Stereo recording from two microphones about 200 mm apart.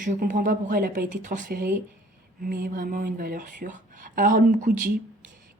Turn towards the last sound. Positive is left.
turn(degrees=-40)  # may be behind; listen again after turning